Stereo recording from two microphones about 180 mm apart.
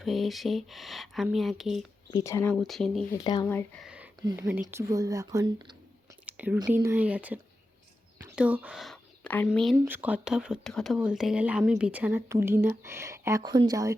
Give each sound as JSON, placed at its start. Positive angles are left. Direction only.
{"t": 0.0, "sound": "speech", "side_deg": 0}
{"t": 2.0, "sound": "speech", "side_deg": 15}
{"t": 2.6, "sound": "speech", "side_deg": 0}
{"t": 3.1, "sound": "speech", "side_deg": 25}
{"t": 3.8, "sound": "a sound", "side_deg": -5}
{"t": 4.4, "sound": "speech", "side_deg": -10}
{"t": 6.2, "sound": "whispering", "side_deg": -10}
{"t": 6.8, "sound": "speech", "side_deg": -10}
{"t": 9.7, "sound": "speech", "side_deg": -10}